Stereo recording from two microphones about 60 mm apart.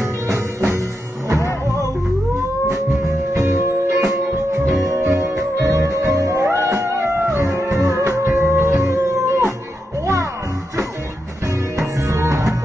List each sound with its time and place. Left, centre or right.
0.0 s music: right
3.3 s music: right
6.4 s music: right
11.8 s music: right